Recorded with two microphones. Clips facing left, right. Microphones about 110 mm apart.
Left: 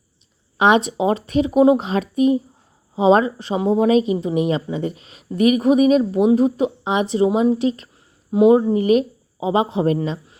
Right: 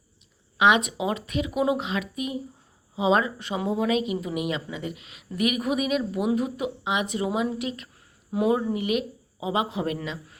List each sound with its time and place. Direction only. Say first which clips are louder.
0.6 s speech: left 5 dB; 35° left (ahead or behind)